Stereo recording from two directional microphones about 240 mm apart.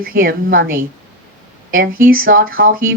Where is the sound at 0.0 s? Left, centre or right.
Right.